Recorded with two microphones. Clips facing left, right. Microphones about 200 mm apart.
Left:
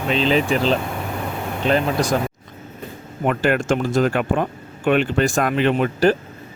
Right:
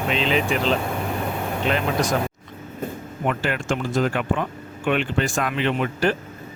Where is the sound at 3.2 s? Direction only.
50° left (ahead or behind).